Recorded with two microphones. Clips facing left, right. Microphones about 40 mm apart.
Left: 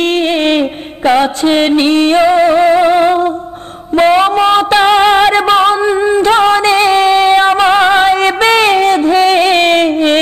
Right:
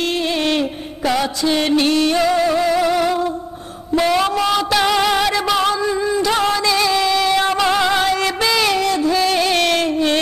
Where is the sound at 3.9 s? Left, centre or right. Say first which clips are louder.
Left 8 dB; left.